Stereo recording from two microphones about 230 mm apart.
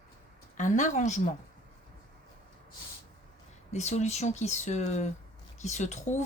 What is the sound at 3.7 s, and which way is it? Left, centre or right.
Speech, left.